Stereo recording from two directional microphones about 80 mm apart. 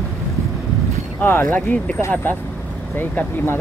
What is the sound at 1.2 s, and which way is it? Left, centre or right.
Speech, left.